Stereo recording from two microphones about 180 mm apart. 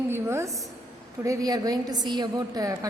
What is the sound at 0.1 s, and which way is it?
A woman's voice, 15° right (ahead or behind).